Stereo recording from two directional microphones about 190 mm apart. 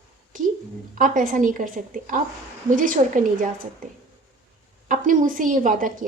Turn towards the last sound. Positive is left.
turn(degrees=-45)  # may be behind; listen again after turning